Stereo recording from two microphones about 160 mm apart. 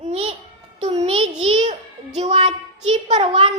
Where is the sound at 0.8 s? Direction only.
40° right (ahead or behind).